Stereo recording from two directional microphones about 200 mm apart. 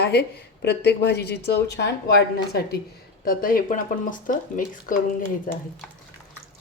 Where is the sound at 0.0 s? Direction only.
55° left (ahead or behind).